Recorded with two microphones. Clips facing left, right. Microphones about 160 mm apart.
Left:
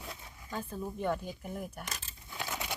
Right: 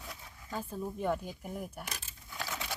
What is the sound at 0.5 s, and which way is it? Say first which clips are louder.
Speech: even; 5° right (ahead or behind).